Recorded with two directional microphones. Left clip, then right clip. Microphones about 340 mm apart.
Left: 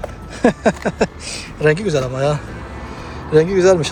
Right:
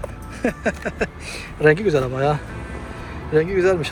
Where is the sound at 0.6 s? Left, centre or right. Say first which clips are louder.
Left 6 dB; centre.